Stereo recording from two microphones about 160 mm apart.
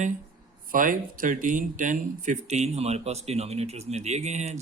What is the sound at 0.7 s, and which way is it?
Speech, 60° right (ahead or behind).